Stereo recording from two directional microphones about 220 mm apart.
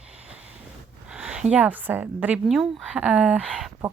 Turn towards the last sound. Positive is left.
turn(degrees=0)  # may be behind; listen again after turning